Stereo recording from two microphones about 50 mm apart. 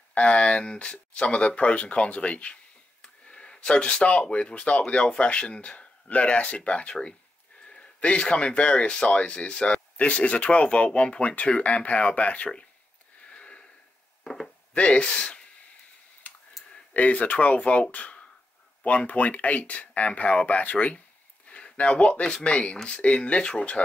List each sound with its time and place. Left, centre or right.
0.1 s speech: left
13.3 s sniff: left
14.2 s speech: centre
14.7 s speech: left
16.2 s clicking: left
16.9 s speech: left